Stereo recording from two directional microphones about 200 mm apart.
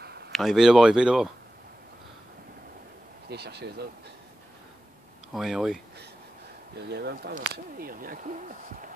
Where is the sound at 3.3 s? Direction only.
55° right (ahead or behind).